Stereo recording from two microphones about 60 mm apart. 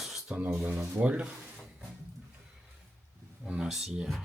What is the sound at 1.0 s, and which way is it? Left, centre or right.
Speech, centre.